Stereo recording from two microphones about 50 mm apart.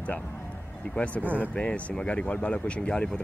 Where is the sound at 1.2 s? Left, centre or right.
Right.